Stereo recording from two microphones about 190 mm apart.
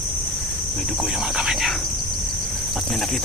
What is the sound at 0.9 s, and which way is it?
Speech, centre (ahead or behind).